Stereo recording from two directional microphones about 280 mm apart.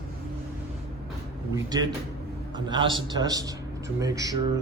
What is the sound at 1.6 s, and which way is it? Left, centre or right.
A man's voice, centre.